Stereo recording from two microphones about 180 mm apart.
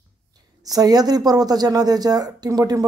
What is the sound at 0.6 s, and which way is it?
Speech, 20° right (ahead or behind).